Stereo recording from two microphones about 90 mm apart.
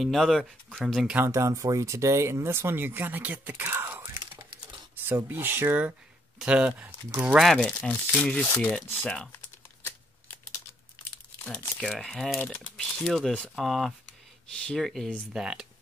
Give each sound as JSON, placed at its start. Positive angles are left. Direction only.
{"t": 0.0, "sound": "speech", "side_deg": 0}
{"t": 1.1, "sound": "speech", "side_deg": -30}
{"t": 7.5, "sound": "speech", "side_deg": 10}
{"t": 11.4, "sound": "speech", "side_deg": 5}
{"t": 15.3, "sound": "speech", "side_deg": -5}